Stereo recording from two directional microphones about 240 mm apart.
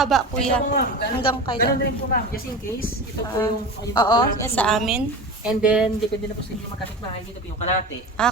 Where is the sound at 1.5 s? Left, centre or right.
Left.